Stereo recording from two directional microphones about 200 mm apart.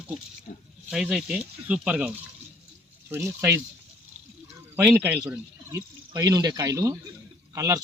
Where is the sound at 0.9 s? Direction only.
5° right (ahead or behind).